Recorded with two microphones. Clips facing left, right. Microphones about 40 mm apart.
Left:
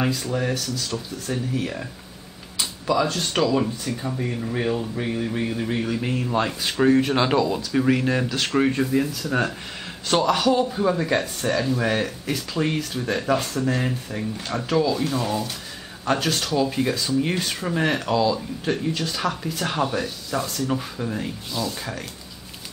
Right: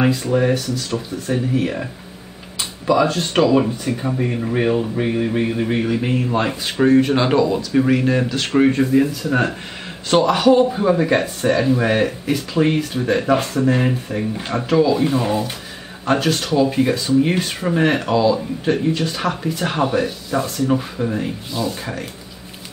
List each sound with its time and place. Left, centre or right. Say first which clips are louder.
0.0 s speech: right 7 dB; centre
2.9 s speech: right 6 dB; centre
16.1 s speech: right 5 dB; centre